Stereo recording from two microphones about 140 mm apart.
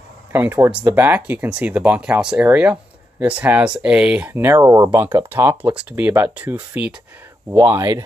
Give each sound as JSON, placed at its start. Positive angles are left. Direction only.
{"t": 0.3, "sound": "speech", "side_deg": -15}